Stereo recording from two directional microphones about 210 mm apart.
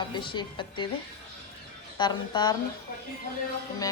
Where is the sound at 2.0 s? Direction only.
20° left (ahead or behind).